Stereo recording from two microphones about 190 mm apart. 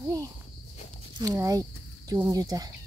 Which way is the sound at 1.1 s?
15° right (ahead or behind).